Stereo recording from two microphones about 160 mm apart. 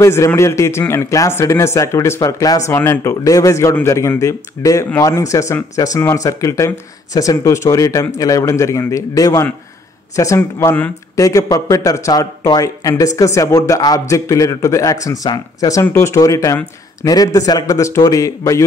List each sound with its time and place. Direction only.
0.0 s speech: 15° left (ahead or behind)